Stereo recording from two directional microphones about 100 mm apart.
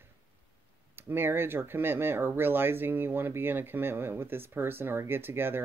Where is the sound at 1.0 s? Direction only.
20° right (ahead or behind).